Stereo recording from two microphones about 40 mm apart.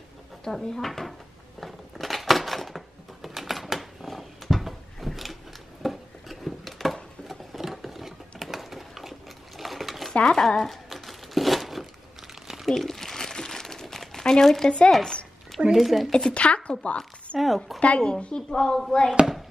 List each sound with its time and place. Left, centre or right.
0.4 s speech: centre
1.6 s a sound: centre
7.6 s sewing machine: centre
9.6 s stir: centre
10.1 s speech: left
10.5 s crumpling: centre
12.6 s crumpling: centre
14.9 s speech: centre
15.7 s speech: centre
16.1 s speech: centre
16.3 s a woman's voice: left
18.3 s a woman's voice: centre